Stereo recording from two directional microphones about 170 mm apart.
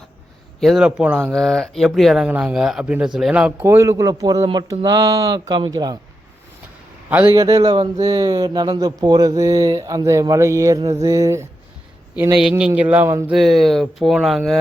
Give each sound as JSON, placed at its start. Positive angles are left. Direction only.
{"t": 0.6, "sound": "speech", "side_deg": 0}
{"t": 7.1, "sound": "speech", "side_deg": -10}
{"t": 12.1, "sound": "speech", "side_deg": -5}
{"t": 13.3, "sound": "speech", "side_deg": 0}